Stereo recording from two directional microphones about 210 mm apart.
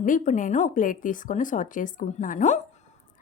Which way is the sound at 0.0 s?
40° left (ahead or behind).